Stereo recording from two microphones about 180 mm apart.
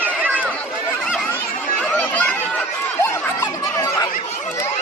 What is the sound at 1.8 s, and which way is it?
Chatter, 5° left (ahead or behind).